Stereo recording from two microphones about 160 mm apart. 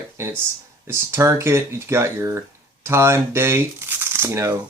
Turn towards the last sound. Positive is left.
turn(degrees=-15)  # may be behind; listen again after turning